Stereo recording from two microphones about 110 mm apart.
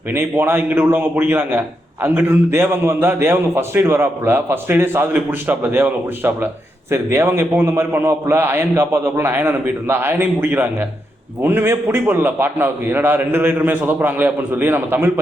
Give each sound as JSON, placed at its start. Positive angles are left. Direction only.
{"t": 0.1, "sound": "a man's voice", "side_deg": -20}